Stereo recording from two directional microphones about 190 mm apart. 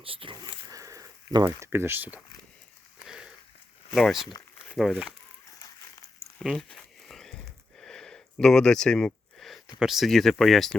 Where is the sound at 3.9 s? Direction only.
Centre (ahead or behind).